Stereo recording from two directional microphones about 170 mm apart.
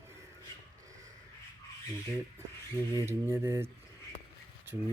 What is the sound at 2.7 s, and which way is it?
Speech, 15° right (ahead or behind).